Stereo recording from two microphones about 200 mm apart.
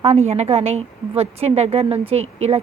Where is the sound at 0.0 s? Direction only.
30° right (ahead or behind).